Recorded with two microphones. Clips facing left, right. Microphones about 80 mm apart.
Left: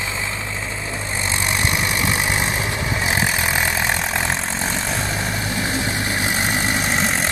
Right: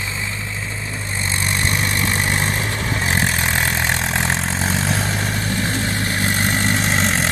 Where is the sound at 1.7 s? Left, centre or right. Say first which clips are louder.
Right 1 dB; centre.